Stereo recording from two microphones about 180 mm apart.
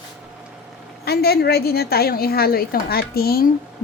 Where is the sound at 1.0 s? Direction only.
60° left (ahead or behind).